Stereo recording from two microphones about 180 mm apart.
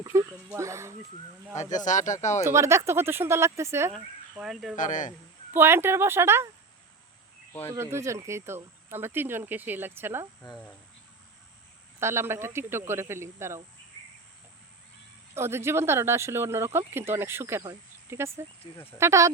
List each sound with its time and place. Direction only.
0.0 s speech: 15° right (ahead or behind)
1.7 s speech: 45° left (ahead or behind)
2.4 s speech: 15° right (ahead or behind)
3.9 s speech: centre (ahead or behind)
4.8 s speech: 45° left (ahead or behind)
5.5 s speech: 15° right (ahead or behind)
7.8 s speech: 15° right (ahead or behind)
11.9 s speech: 15° right (ahead or behind)
15.4 s speech: 15° right (ahead or behind)